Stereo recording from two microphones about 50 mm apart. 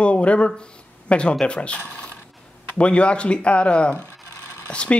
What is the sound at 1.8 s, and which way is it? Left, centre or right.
Mechanisms, left.